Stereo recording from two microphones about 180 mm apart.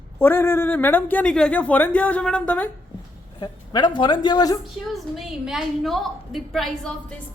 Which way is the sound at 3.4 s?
25° left (ahead or behind).